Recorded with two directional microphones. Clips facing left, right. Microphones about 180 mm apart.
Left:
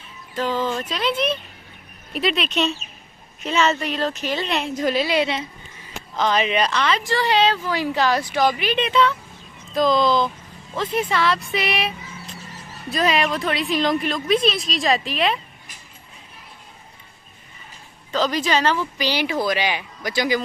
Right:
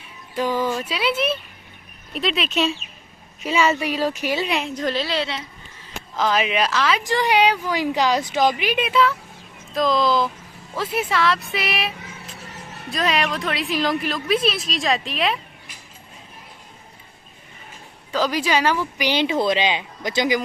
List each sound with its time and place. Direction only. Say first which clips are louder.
0.3 s a woman's voice: right 1 dB; 10° right (ahead or behind)
4.8 s a woman's voice: left 7 dB; 10° left (ahead or behind)
6.1 s a woman's voice: left 1 dB; 5° right (ahead or behind)
7.0 s a woman's voice: right 1 dB; 15° right (ahead or behind); by 15.4 s centre (ahead or behind)
18.1 s speech: even; 10° right (ahead or behind)